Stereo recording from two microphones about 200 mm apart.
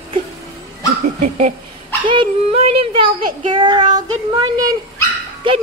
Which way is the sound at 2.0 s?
25° right (ahead or behind).